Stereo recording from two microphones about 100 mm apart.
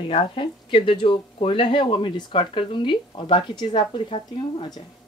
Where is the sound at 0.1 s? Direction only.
65° left (ahead or behind).